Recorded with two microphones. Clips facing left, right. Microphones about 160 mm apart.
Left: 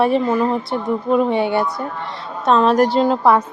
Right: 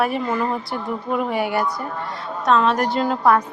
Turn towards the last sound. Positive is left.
turn(degrees=25)  # may be behind; listen again after turning